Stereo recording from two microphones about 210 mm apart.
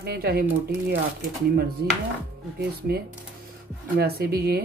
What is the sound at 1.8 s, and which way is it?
Chopping, 55° right (ahead or behind).